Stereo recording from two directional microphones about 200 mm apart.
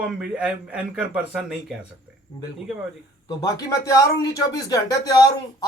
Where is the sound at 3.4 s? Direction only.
20° left (ahead or behind).